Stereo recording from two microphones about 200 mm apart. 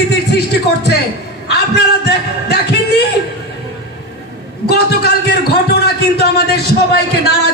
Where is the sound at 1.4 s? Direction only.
55° left (ahead or behind).